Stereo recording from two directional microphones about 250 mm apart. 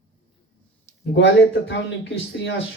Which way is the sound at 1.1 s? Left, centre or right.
Left.